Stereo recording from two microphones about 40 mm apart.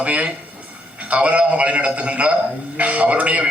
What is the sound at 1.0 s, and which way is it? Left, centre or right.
A man's voice, right.